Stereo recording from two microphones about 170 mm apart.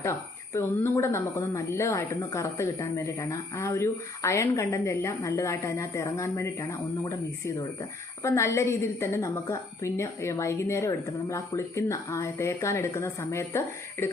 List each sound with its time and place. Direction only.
0.0 s speech: 15° left (ahead or behind)